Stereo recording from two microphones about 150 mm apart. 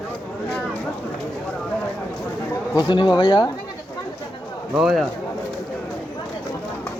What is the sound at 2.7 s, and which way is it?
Speech, 30° left (ahead or behind).